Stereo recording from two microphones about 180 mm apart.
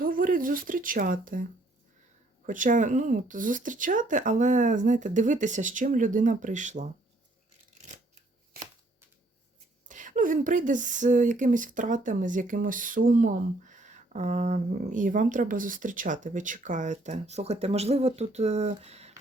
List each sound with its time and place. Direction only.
0.0 s speech: 50° right (ahead or behind)
2.5 s speech: 45° right (ahead or behind)
9.9 s speech: 45° right (ahead or behind)